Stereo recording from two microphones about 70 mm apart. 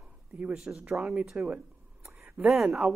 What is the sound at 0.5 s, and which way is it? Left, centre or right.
Speech, centre.